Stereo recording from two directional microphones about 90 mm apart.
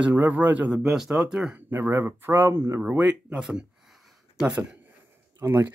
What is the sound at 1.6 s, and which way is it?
Speech, 20° right (ahead or behind).